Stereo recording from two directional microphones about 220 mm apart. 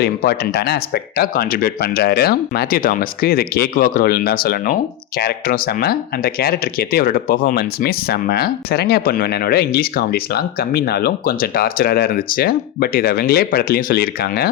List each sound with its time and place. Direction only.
0.0 s speech: 45° left (ahead or behind)